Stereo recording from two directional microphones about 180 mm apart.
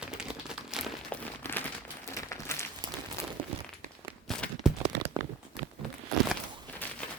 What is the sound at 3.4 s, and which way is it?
Crumpling, 30° right (ahead or behind).